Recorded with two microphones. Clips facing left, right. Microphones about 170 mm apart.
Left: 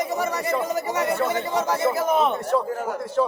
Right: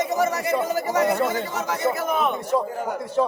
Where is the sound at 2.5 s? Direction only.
15° right (ahead or behind).